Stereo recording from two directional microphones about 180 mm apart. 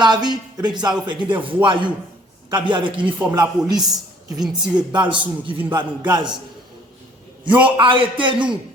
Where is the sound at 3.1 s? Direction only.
10° right (ahead or behind).